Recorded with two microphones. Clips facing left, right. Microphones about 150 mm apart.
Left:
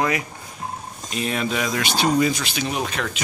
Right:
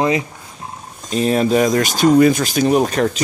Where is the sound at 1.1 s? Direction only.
35° right (ahead or behind).